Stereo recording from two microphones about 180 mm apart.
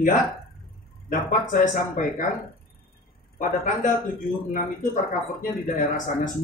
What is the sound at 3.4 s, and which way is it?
Speech, 45° left (ahead or behind).